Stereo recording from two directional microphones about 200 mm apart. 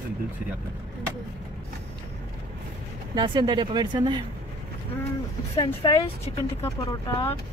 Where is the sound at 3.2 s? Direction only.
20° right (ahead or behind).